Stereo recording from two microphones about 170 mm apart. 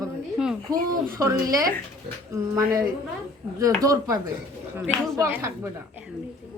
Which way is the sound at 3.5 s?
20° right (ahead or behind).